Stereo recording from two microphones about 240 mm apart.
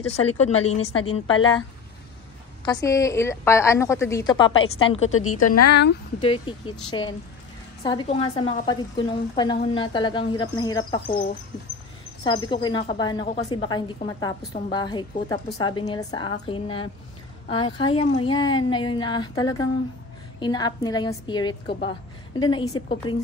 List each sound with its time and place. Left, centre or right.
0.0 s a woman's voice: left
2.6 s a woman's voice: centre
4.9 s a woman's voice: left
5.8 s speech: left
6.5 s a woman's voice: centre